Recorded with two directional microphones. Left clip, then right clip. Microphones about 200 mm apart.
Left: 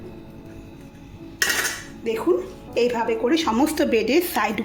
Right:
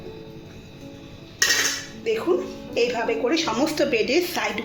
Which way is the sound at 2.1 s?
55° left (ahead or behind).